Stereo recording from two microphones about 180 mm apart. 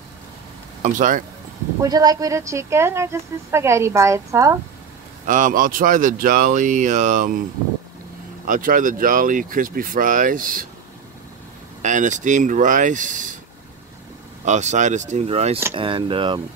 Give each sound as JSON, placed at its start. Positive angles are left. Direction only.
{"t": 0.8, "sound": "speech", "side_deg": -45}
{"t": 1.8, "sound": "speech", "side_deg": -20}
{"t": 5.2, "sound": "speech", "side_deg": -45}
{"t": 8.5, "sound": "speech", "side_deg": -50}
{"t": 11.8, "sound": "speech", "side_deg": -45}
{"t": 14.4, "sound": "speech", "side_deg": -40}